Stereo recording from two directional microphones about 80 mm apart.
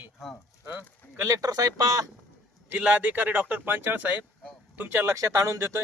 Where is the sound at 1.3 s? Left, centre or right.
Right.